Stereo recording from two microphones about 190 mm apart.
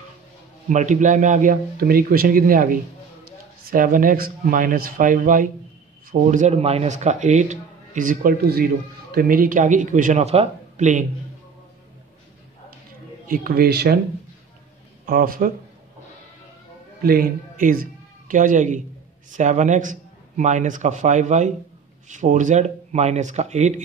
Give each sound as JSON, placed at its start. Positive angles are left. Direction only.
{"t": 0.7, "sound": "a man's voice", "side_deg": -40}
{"t": 13.3, "sound": "a man's voice", "side_deg": -50}
{"t": 15.0, "sound": "a man's voice", "side_deg": -50}
{"t": 17.0, "sound": "a man's voice", "side_deg": -50}